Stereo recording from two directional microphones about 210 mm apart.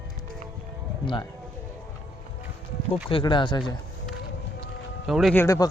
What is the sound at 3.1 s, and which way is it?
Speech, 20° left (ahead or behind).